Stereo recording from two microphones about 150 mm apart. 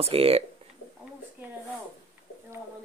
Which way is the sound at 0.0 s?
40° right (ahead or behind).